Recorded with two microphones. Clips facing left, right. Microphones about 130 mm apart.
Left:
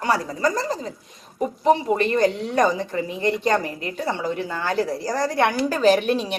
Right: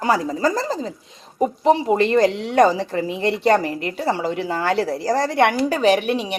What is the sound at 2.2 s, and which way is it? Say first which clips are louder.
Speech: right 2 dB; 90° right.